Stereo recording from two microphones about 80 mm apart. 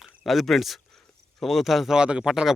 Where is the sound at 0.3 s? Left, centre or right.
Centre.